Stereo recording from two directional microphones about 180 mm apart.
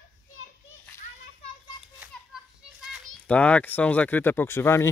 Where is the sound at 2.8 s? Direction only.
Centre (ahead or behind).